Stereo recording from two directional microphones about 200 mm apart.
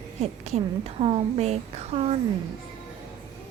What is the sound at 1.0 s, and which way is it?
A woman's voice, 30° right (ahead or behind).